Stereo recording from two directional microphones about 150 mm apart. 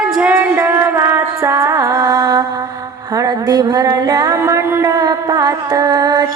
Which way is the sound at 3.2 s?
25° right (ahead or behind).